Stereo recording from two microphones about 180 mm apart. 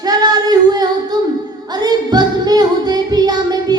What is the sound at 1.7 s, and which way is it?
Music, 20° right (ahead or behind).